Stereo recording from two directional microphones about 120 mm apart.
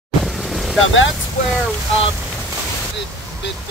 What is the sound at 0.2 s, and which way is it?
Boat, centre (ahead or behind).